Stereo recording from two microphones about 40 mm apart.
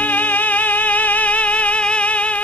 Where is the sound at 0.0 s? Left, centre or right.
Left.